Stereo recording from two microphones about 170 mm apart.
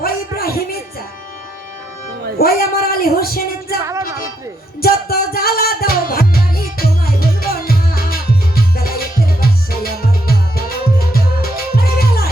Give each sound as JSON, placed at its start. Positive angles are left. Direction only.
{"t": 0.0, "sound": "music", "side_deg": 65}
{"t": 2.4, "sound": "speech", "side_deg": 60}
{"t": 3.8, "sound": "music", "side_deg": -20}
{"t": 4.8, "sound": "music", "side_deg": 60}